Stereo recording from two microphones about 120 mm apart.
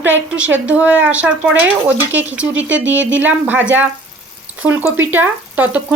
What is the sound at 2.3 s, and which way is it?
Speech, 10° right (ahead or behind).